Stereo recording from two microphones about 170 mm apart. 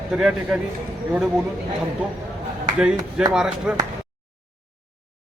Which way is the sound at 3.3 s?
5° right (ahead or behind).